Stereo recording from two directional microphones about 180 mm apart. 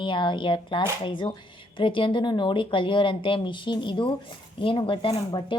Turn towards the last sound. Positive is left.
turn(degrees=30)  # may be behind; listen again after turning